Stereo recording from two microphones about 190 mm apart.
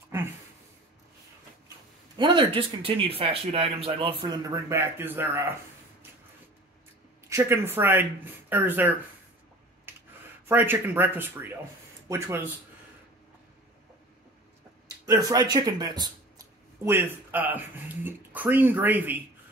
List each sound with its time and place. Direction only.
0.1 s a sound: 15° right (ahead or behind)
2.1 s speech: 25° right (ahead or behind)
4.6 s speech: 15° right (ahead or behind)
7.2 s speech: 15° right (ahead or behind)
9.9 s a sound: 10° right (ahead or behind)
10.4 s speech: 10° right (ahead or behind)
15.0 s speech: 20° right (ahead or behind)